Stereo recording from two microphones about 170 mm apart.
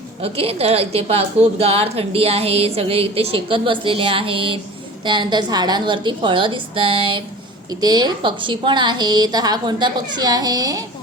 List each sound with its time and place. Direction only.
0.2 s a woman's voice: 35° right (ahead or behind)